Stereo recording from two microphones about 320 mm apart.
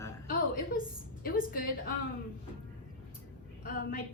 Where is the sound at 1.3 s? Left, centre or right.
Left.